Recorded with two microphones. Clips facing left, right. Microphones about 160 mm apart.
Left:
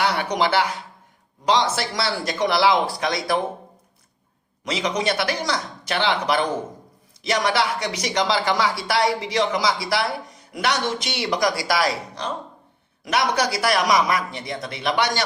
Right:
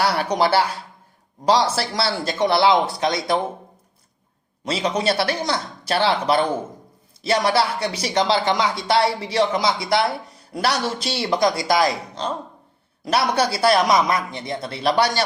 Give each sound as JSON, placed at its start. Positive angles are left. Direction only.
{"t": 0.0, "sound": "a man's voice", "side_deg": -35}
{"t": 4.6, "sound": "speech", "side_deg": -30}